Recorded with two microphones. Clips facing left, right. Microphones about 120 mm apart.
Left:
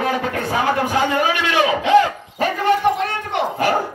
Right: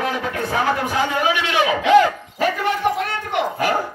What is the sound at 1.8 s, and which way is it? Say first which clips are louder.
Speech: right 3 dB; 30° left (ahead or behind).